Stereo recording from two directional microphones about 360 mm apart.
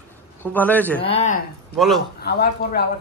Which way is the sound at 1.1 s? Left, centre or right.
Centre.